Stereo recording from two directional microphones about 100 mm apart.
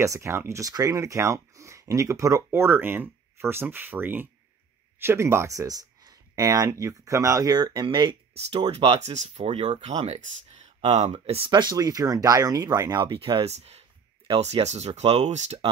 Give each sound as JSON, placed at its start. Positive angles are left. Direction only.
{"t": 0.0, "sound": "speech", "side_deg": -30}
{"t": 2.6, "sound": "speech", "side_deg": -20}
{"t": 7.5, "sound": "speech", "side_deg": -45}
{"t": 8.5, "sound": "speech", "side_deg": -65}
{"t": 11.5, "sound": "speech", "side_deg": -45}
{"t": 13.1, "sound": "speech", "side_deg": -65}